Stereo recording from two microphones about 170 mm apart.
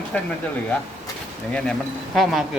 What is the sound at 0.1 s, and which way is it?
Speech, 5° left (ahead or behind).